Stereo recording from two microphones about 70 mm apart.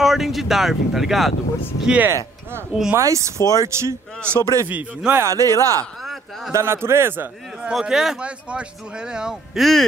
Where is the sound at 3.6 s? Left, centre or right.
Right.